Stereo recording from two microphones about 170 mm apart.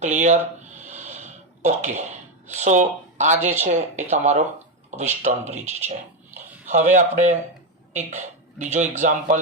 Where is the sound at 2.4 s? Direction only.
45° right (ahead or behind).